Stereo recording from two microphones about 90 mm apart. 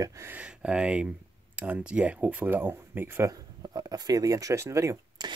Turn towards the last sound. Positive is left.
turn(degrees=-50)  # may be behind; listen again after turning